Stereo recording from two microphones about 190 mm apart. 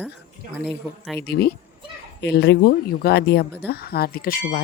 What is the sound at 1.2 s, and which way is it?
Speech, 55° left (ahead or behind).